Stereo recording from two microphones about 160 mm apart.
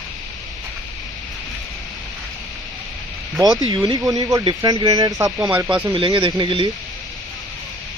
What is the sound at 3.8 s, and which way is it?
Speech, 25° right (ahead or behind).